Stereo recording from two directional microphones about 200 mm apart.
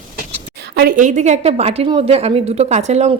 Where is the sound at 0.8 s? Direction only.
45° right (ahead or behind).